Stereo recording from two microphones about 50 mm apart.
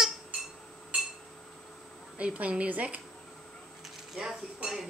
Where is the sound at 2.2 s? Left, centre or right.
Right.